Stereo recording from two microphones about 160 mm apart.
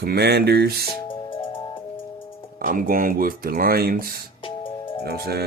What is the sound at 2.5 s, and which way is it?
Speech, 60° right (ahead or behind).